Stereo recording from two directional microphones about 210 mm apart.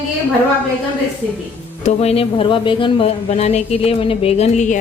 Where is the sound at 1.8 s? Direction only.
30° left (ahead or behind).